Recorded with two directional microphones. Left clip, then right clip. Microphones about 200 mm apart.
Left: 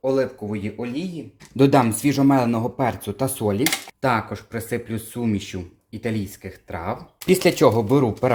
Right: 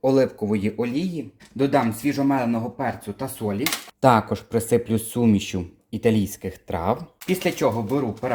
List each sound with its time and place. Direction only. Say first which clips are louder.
0.0 s speech: right 2 dB; 35° right (ahead or behind)
1.5 s speech: left 4 dB; 35° left (ahead or behind)
4.0 s speech: right 5 dB; 25° right (ahead or behind)
7.3 s speech: left 6 dB; 35° left (ahead or behind)